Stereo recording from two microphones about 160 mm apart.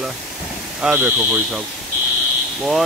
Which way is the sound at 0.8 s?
10° right (ahead or behind).